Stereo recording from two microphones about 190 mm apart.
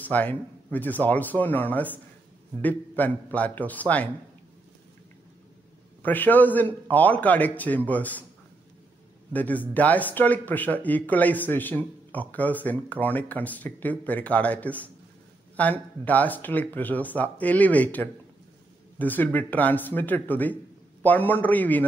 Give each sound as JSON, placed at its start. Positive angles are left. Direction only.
{"t": 0.0, "sound": "speech", "side_deg": 10}
{"t": 6.0, "sound": "speech", "side_deg": 10}
{"t": 9.3, "sound": "speech", "side_deg": 10}